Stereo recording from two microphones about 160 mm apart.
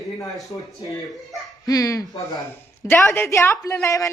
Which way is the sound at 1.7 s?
20° left (ahead or behind).